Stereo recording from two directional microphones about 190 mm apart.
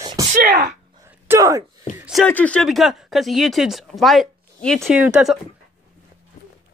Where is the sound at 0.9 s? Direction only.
15° right (ahead or behind).